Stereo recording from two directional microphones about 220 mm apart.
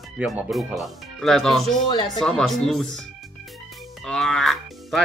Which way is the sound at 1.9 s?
20° left (ahead or behind).